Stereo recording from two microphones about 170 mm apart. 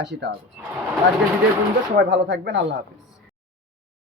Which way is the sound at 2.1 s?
90° right.